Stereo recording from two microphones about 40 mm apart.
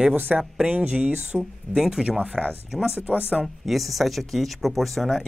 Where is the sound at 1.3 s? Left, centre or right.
Centre.